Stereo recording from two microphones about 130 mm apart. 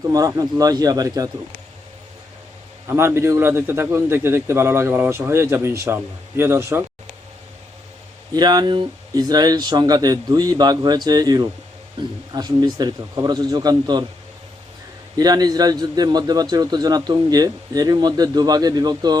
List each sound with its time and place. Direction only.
0.0 s a man's voice: 25° right (ahead or behind)
2.8 s a man's voice: 20° right (ahead or behind)
8.3 s a man's voice: 30° right (ahead or behind)
15.2 s a man's voice: 30° right (ahead or behind)